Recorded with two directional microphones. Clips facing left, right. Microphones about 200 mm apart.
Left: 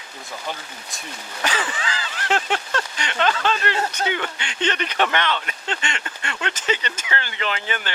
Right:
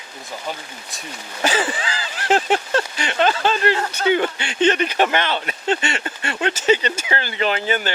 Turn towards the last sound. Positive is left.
turn(degrees=-35)  # may be behind; listen again after turning